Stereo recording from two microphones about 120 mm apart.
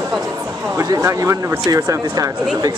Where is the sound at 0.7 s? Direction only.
25° right (ahead or behind).